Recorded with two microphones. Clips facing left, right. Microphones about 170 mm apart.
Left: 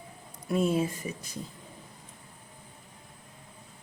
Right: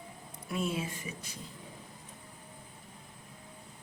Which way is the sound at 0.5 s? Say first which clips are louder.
Left 8 dB; 40° left (ahead or behind).